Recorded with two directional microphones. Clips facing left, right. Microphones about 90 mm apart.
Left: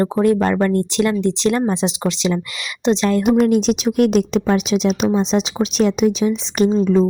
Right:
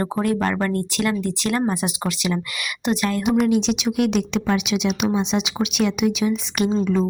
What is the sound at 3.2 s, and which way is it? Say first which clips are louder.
Speech: left 4 dB; 45° left (ahead or behind).